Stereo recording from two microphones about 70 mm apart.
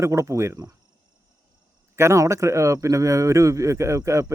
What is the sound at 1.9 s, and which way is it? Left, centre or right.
Speech, right.